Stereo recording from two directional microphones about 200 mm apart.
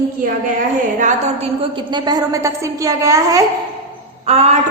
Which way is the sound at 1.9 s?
20° right (ahead or behind).